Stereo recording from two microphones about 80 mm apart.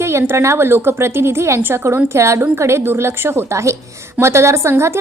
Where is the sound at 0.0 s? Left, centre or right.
Right.